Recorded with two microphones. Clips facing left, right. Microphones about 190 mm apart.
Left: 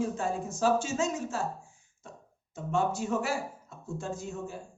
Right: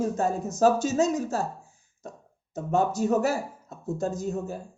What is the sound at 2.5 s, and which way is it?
Speech, 40° right (ahead or behind).